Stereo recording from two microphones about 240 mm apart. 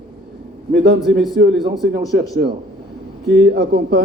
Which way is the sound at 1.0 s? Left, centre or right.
Centre.